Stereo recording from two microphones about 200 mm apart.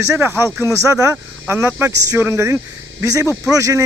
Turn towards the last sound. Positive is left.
turn(degrees=-15)  # may be behind; listen again after turning